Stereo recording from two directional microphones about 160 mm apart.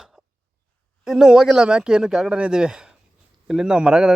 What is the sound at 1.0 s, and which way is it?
Speech, 5° right (ahead or behind).